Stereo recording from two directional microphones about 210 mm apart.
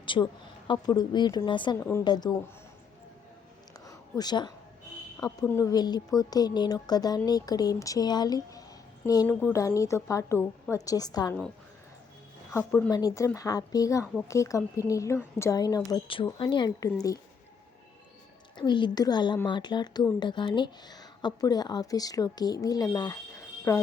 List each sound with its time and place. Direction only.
0.0 s a sound: 25° left (ahead or behind)
0.7 s a woman's voice: 20° left (ahead or behind)
1.8 s a woman's voice: 10° left (ahead or behind)
3.8 s a sound: 20° left (ahead or behind)
5.1 s a woman's voice: 15° left (ahead or behind)
12.5 s a woman's voice: 10° left (ahead or behind)
18.5 s a woman's voice: 20° left (ahead or behind)